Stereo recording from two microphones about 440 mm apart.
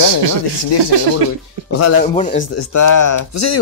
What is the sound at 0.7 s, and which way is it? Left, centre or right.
Speech, left.